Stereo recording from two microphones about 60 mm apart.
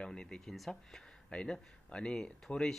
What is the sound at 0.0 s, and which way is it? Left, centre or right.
Speech, centre.